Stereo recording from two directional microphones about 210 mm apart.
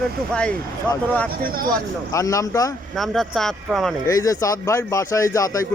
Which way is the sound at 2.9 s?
Centre (ahead or behind).